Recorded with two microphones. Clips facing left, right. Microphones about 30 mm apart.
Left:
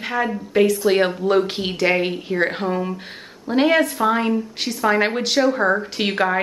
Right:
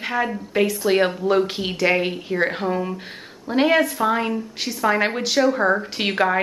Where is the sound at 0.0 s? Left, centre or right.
Centre.